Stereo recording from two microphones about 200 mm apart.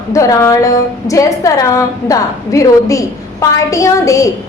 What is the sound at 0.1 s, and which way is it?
A woman's voice, 15° left (ahead or behind).